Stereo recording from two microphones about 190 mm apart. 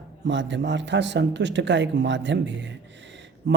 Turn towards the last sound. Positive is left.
turn(degrees=-70)  # may be behind; listen again after turning